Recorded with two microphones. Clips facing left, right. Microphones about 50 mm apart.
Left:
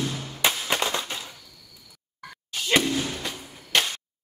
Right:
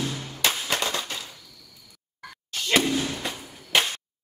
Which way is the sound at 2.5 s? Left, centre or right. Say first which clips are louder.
Even; centre.